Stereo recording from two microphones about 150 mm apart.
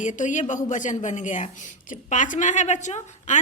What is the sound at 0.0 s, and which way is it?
A woman's voice, 55° left (ahead or behind).